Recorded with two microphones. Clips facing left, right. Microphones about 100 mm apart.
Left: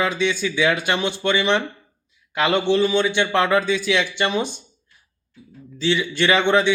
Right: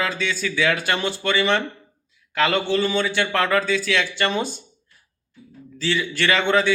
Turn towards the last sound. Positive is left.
turn(degrees=20)  # may be behind; listen again after turning